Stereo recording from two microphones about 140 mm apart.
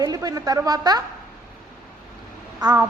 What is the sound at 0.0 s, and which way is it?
A woman's voice, 25° right (ahead or behind).